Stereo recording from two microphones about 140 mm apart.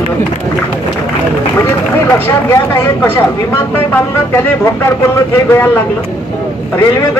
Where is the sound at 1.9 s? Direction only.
15° left (ahead or behind).